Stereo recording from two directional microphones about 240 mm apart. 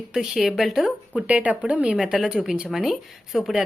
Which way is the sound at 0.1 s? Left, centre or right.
Centre.